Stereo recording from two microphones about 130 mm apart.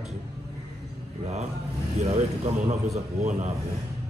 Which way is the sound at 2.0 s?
55° right (ahead or behind).